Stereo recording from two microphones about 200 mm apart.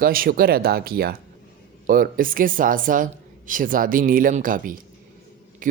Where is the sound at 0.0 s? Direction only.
45° right (ahead or behind).